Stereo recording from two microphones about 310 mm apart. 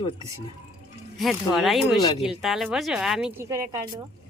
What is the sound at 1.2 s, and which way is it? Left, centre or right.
Speech, centre.